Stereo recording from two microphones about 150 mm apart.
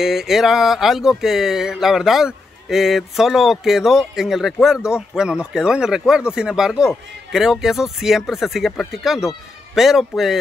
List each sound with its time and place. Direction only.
0.0 s speech: 5° right (ahead or behind)